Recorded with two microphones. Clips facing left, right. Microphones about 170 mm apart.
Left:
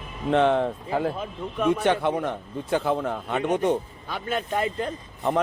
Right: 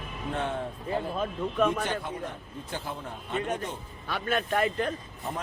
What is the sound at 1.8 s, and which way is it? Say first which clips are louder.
Speech: left 10 dB; 75° left (ahead or behind).